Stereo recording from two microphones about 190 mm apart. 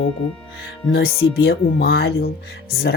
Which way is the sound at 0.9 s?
55° left (ahead or behind).